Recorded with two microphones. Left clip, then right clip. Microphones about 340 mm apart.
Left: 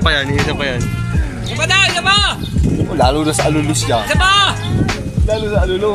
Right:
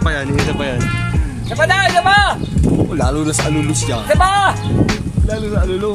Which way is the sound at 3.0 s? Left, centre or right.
Left.